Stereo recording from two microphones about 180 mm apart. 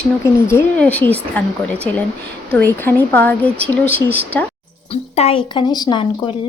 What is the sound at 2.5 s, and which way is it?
A woman's voice, 10° left (ahead or behind).